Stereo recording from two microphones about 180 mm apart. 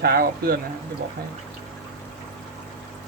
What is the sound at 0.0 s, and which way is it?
Speech, 60° right (ahead or behind).